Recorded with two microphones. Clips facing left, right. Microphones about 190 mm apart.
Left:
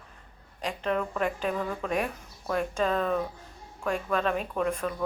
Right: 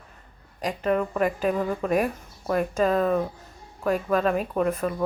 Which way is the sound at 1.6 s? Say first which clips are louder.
Right 5 dB; 20° right (ahead or behind).